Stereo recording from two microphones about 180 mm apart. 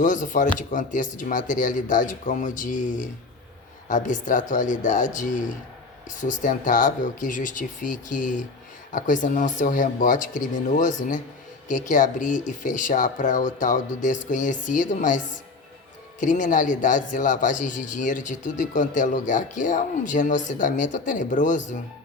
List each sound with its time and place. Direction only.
0.0 s speech: 45° left (ahead or behind)
16.2 s speech: 45° left (ahead or behind)